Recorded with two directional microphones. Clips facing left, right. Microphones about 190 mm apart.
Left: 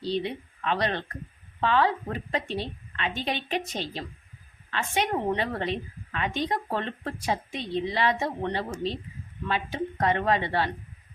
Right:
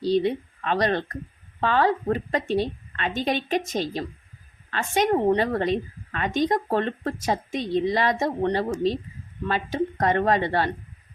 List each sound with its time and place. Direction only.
0.0 s a woman's voice: 40° right (ahead or behind)